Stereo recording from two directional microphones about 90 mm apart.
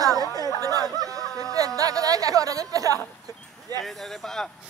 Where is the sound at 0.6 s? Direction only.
40° right (ahead or behind).